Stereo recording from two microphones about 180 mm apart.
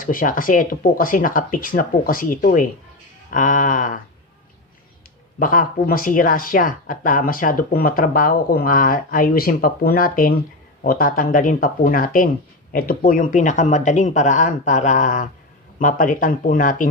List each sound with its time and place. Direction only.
0.0 s speech: 50° left (ahead or behind)
5.4 s speech: 50° left (ahead or behind)